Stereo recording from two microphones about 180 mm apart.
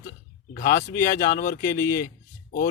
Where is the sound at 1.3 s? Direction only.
55° left (ahead or behind).